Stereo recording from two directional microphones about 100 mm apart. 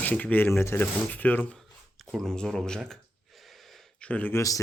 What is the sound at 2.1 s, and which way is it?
Speech, centre (ahead or behind).